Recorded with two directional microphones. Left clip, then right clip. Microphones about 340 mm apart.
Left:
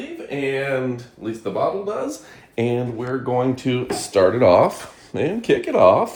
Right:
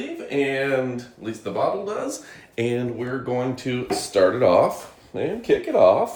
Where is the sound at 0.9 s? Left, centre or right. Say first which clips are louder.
Left 2 dB; centre.